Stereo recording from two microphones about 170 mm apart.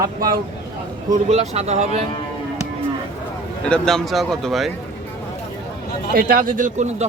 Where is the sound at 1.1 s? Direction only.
40° right (ahead or behind).